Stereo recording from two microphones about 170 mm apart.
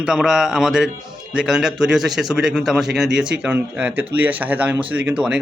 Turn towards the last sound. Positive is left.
turn(degrees=-5)  # may be behind; listen again after turning